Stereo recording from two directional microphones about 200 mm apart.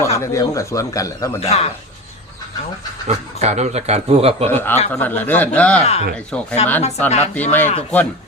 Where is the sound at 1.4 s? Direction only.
35° left (ahead or behind).